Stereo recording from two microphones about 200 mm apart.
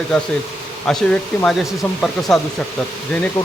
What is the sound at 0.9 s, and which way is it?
Speech, 5° left (ahead or behind).